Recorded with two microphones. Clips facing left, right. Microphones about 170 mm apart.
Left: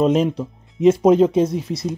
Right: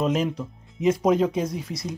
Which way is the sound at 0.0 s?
30° left (ahead or behind).